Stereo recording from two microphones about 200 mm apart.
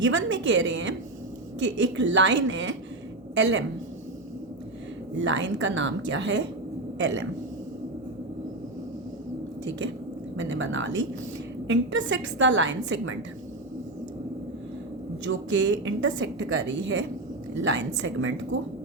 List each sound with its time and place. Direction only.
0.0 s a woman's voice: 70° right (ahead or behind)
5.1 s a woman's voice: 65° right (ahead or behind)
9.6 s a woman's voice: 65° right (ahead or behind)
15.3 s a woman's voice: 65° right (ahead or behind)